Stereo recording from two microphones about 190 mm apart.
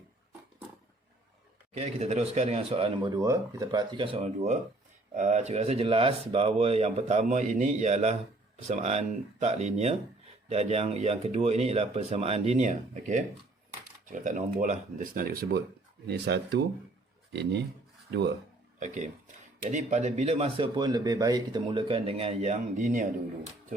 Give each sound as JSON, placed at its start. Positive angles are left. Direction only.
{"t": 1.7, "sound": "speech", "side_deg": -35}
{"t": 3.2, "sound": "speech", "side_deg": -15}
{"t": 18.8, "sound": "speech", "side_deg": -40}